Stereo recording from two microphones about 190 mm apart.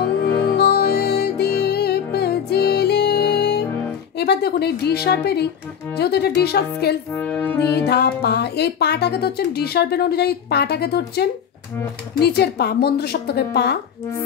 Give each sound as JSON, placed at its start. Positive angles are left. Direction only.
{"t": 0.6, "sound": "music", "side_deg": 55}
{"t": 4.2, "sound": "speech", "side_deg": 60}
{"t": 7.2, "sound": "music", "side_deg": 10}
{"t": 7.8, "sound": "speech", "side_deg": 60}